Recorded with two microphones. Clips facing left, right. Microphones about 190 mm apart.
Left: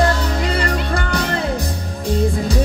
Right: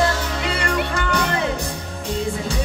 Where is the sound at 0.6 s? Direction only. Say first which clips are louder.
Left 2 dB; 35° left (ahead or behind).